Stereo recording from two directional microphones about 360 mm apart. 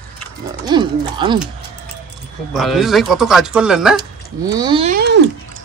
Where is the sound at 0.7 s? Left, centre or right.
Centre.